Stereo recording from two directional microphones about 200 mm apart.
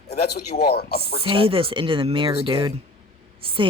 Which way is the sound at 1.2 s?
25° right (ahead or behind).